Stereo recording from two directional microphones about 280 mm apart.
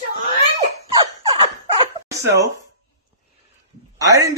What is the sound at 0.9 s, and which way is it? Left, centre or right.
Dog, centre.